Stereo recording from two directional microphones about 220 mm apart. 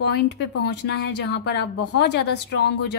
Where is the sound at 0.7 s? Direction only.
50° left (ahead or behind).